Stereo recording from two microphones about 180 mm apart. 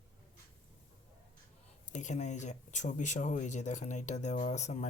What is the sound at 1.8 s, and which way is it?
Speech, 40° left (ahead or behind).